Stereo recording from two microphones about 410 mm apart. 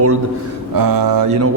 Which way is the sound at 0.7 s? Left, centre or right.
Right.